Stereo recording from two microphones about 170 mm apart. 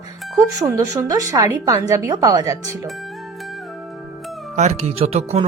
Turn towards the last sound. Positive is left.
turn(degrees=-40)  # may be behind; listen again after turning